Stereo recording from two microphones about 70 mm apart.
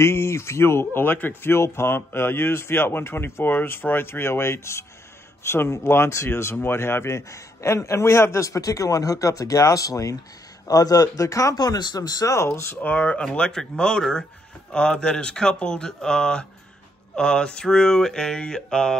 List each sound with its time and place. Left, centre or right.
0.0 s speech: left
10.7 s speech: left
12.4 s speech: left
13.2 s a sound: centre